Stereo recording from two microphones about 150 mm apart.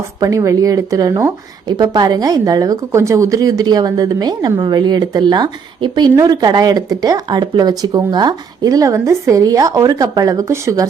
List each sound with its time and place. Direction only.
0.2 s speech: 20° right (ahead or behind)